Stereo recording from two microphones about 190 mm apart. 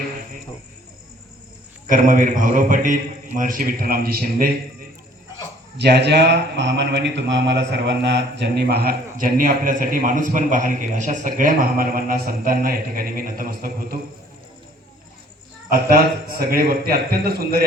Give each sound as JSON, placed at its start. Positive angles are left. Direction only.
{"t": 1.9, "sound": "a man's voice", "side_deg": -45}
{"t": 5.7, "sound": "mantra", "side_deg": -60}
{"t": 9.1, "sound": "a man's voice", "side_deg": -45}
{"t": 15.7, "sound": "a man's voice", "side_deg": -50}